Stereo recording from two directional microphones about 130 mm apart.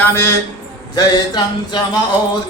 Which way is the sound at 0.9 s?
30° left (ahead or behind).